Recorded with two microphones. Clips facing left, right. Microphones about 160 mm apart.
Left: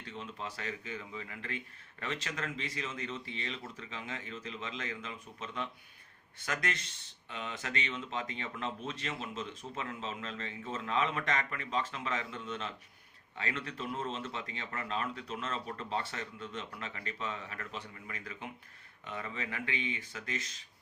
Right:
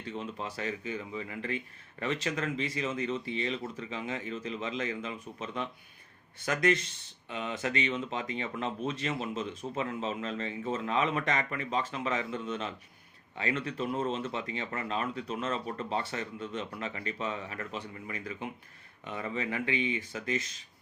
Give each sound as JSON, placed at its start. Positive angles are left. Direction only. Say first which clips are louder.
{"t": 0.2, "sound": "speech", "louder": "right 4 dB", "side_deg": -15}